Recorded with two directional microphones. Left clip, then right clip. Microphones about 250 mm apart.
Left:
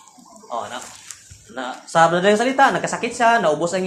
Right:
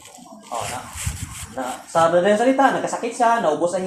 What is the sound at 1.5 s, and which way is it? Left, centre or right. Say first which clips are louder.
Speech: left 3 dB; left.